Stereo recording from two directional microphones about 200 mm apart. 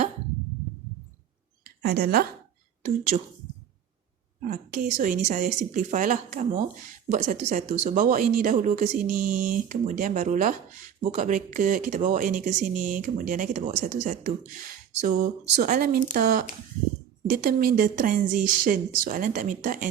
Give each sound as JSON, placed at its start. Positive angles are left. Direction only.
{"t": 1.6, "sound": "a sound", "side_deg": -50}
{"t": 3.1, "sound": "speech", "side_deg": -35}
{"t": 4.4, "sound": "speech", "side_deg": -45}